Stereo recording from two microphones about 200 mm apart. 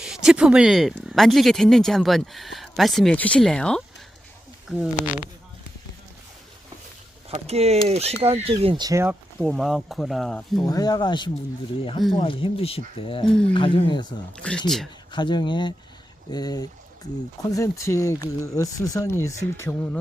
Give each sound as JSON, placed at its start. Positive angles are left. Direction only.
{"t": 0.0, "sound": "speech", "side_deg": -5}
{"t": 7.3, "sound": "speech", "side_deg": -30}
{"t": 9.4, "sound": "speech", "side_deg": 0}
{"t": 10.6, "sound": "speech", "side_deg": 20}
{"t": 14.3, "sound": "speech", "side_deg": 5}
{"t": 15.1, "sound": "speech", "side_deg": 25}